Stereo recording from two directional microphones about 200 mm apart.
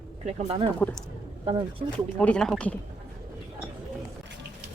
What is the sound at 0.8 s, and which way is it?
Speech, 10° left (ahead or behind).